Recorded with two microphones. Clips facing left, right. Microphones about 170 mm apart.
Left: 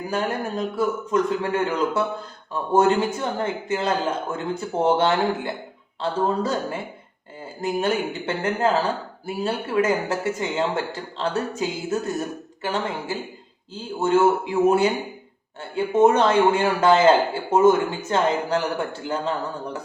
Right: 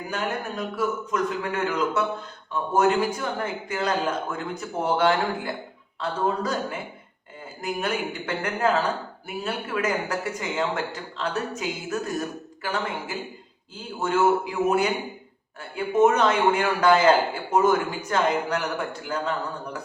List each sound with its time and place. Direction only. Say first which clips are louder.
0.1 s a man's voice: left 4 dB; 30° left (ahead or behind)